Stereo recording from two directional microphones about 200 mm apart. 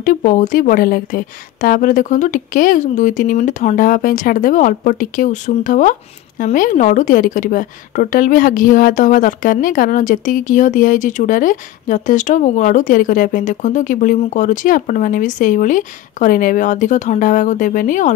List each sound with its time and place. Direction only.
0.0 s a woman's voice: 45° left (ahead or behind)